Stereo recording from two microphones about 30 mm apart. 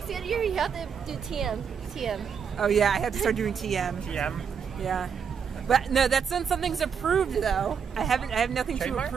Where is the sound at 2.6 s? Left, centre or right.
Centre.